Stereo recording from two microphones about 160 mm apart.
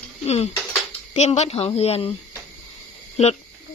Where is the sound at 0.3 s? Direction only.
40° left (ahead or behind).